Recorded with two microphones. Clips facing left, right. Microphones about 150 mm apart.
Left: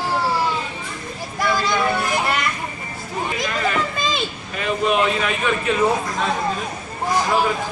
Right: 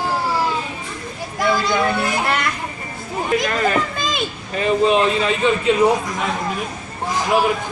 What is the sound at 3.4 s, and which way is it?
Children playing, 40° right (ahead or behind).